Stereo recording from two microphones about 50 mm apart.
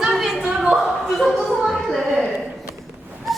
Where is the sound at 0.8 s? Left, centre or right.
Centre.